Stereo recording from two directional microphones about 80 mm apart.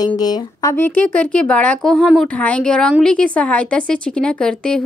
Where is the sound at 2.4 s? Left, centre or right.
Centre.